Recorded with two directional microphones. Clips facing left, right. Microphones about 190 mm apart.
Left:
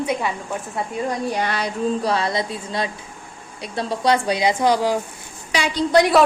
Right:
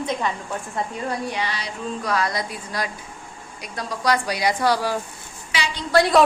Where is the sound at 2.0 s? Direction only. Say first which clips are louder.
Left 3 dB; 30° left (ahead or behind).